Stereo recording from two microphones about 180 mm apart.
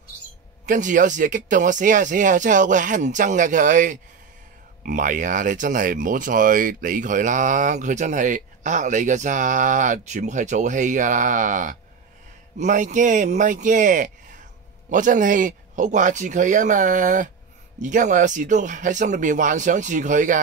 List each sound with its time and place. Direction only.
0.7 s speech: 45° right (ahead or behind)